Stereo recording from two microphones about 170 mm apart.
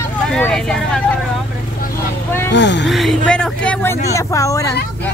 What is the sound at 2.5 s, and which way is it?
Speech, 90° left.